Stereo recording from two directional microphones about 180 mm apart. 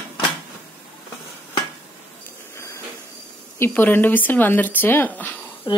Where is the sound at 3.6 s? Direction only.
10° left (ahead or behind).